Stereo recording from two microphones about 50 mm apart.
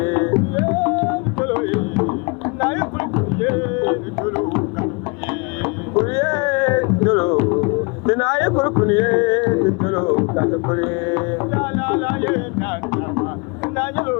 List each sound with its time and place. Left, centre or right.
0.0 s music: left
1.5 s music: left
2.6 s a sound: left
4.4 s music: left
5.6 s music: left
7.3 s music: left
8.2 s a sound: left
8.5 s music: left
11.8 s music: left